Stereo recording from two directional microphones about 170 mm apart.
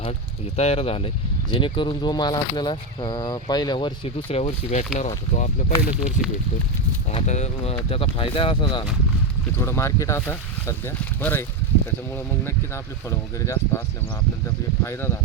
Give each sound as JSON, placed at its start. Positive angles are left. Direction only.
{"t": 0.5, "sound": "speech", "side_deg": 35}
{"t": 9.6, "sound": "speech", "side_deg": 15}
{"t": 14.8, "sound": "speech", "side_deg": 15}